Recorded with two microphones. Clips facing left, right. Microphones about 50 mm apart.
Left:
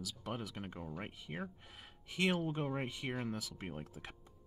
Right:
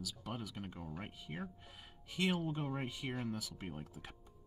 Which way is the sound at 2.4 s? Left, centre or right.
Centre.